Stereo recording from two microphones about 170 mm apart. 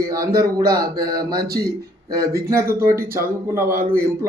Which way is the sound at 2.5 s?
15° right (ahead or behind).